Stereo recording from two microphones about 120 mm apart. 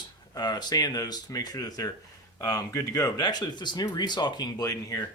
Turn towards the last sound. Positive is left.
turn(degrees=30)  # may be behind; listen again after turning